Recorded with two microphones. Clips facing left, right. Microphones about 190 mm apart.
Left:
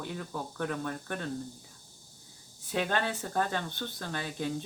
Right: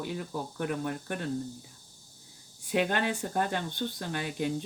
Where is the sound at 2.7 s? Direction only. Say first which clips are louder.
Right 3 dB; 15° right (ahead or behind).